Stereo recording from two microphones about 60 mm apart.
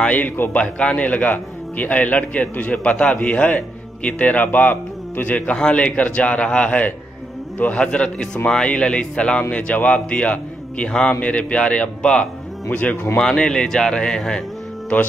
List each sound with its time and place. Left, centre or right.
0.0 s a man's voice: left
5.6 s a man's voice: centre
12.9 s speech: left
13.2 s speech: centre